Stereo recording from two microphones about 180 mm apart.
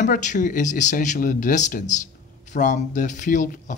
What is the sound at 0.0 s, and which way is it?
Speech, 45° left (ahead or behind).